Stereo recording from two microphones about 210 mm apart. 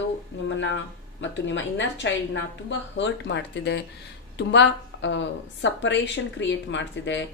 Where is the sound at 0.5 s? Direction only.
60° left (ahead or behind).